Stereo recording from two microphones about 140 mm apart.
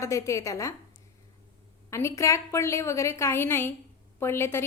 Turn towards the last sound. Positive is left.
turn(degrees=15)  # may be behind; listen again after turning